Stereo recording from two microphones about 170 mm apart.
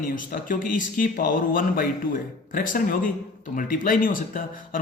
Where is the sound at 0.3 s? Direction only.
55° left (ahead or behind).